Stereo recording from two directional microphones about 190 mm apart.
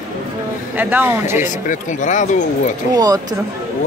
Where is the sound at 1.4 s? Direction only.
40° left (ahead or behind).